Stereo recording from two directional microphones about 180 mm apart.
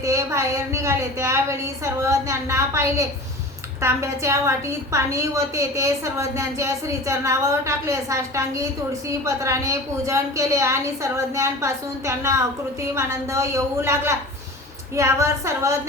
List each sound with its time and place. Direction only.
0.0 s a woman's voice: 15° right (ahead or behind)